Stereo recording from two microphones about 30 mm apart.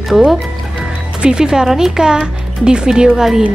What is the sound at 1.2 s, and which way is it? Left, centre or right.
Speech, right.